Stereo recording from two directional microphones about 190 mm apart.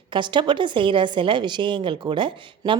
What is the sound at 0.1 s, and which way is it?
A woman's voice, 25° right (ahead or behind).